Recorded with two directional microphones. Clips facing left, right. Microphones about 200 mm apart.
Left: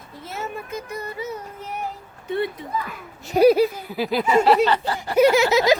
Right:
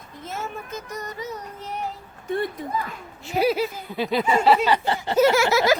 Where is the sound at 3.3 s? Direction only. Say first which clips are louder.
Left 7 dB; 45° left (ahead or behind).